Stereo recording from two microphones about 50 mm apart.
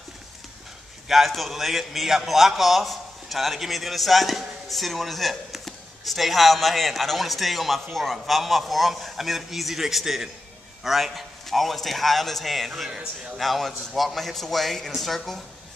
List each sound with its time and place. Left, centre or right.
1.0 s a man's voice: centre